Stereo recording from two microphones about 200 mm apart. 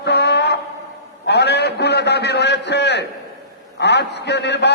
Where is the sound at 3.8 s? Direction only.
60° left (ahead or behind).